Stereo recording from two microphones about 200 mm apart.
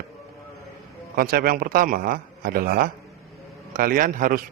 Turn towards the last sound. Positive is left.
turn(degrees=-45)  # may be behind; listen again after turning